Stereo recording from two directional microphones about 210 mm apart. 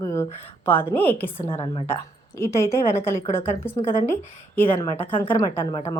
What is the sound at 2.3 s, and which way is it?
A woman's voice, 10° left (ahead or behind).